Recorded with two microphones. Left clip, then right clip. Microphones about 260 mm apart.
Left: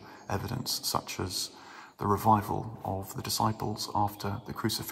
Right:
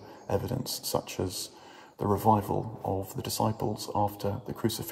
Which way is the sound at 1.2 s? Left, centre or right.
Left.